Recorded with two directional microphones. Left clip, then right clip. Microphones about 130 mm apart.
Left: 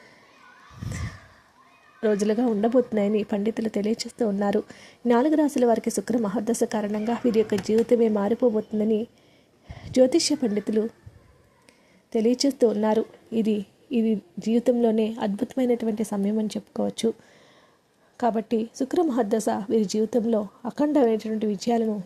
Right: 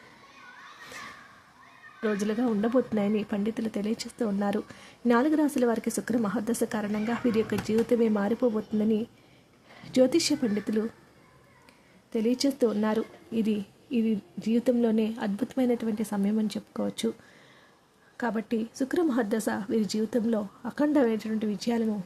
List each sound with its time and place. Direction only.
2.0 s a woman's voice: 30° left (ahead or behind)
12.1 s speech: 30° left (ahead or behind)
18.2 s speech: 35° left (ahead or behind)